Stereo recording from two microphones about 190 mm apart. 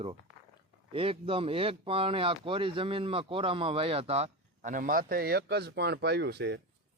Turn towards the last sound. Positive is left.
turn(degrees=-60)  # may be behind; listen again after turning